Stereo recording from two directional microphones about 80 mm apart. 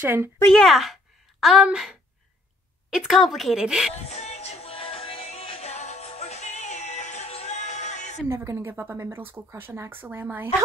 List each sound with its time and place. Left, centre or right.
0.0 s speech: right
0.5 s a woman's voice: centre
8.3 s a woman's voice: right